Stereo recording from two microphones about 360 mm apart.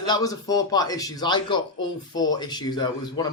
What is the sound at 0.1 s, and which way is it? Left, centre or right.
Speech, centre.